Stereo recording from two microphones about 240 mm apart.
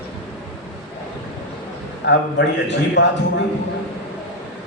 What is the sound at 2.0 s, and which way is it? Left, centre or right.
A man's voice, left.